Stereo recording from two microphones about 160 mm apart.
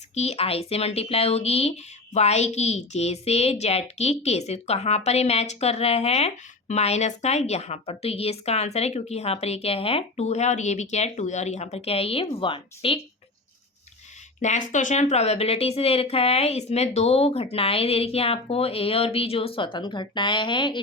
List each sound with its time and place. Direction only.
0.1 s speech: 40° left (ahead or behind)
14.4 s speech: 50° left (ahead or behind); by 20.8 s 30° left (ahead or behind)